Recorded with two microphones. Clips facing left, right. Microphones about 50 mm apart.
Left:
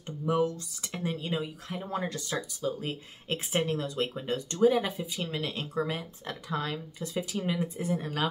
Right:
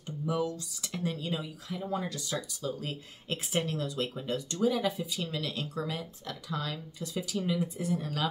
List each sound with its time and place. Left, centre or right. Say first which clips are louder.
0.3 s speech: left 4 dB; left
2.3 s speech: left 2 dB; left